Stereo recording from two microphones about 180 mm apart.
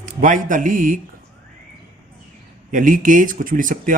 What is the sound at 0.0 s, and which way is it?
Speech, 50° right (ahead or behind).